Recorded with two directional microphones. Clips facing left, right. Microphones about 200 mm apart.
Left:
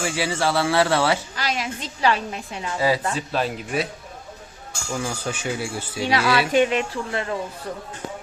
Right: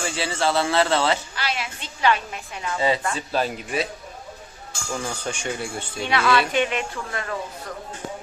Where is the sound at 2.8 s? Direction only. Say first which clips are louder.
Left 1 dB; 25° right (ahead or behind).